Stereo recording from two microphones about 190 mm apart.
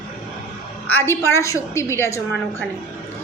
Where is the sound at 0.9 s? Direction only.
10° left (ahead or behind).